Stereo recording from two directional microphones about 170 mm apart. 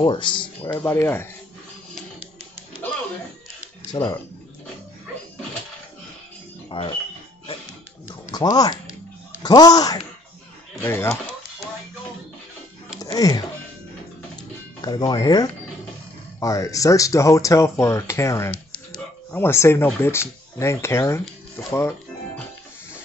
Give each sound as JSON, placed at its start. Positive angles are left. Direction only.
{"t": 0.0, "sound": "speech", "side_deg": 30}
{"t": 0.7, "sound": "speech", "side_deg": 15}
{"t": 3.9, "sound": "speech", "side_deg": 20}
{"t": 6.8, "sound": "speech", "side_deg": 30}
{"t": 8.1, "sound": "music", "side_deg": 20}
{"t": 9.4, "sound": "speech", "side_deg": 25}
{"t": 13.0, "sound": "music", "side_deg": 20}
{"t": 14.9, "sound": "speech", "side_deg": 25}